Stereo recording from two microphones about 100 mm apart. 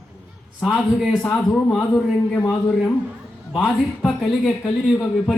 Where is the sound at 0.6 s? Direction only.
Centre (ahead or behind).